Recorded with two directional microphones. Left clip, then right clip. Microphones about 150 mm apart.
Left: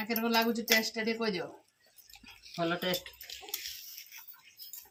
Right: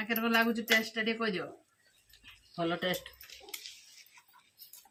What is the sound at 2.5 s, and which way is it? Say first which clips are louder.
Speech: left 1 dB; 5° left (ahead or behind).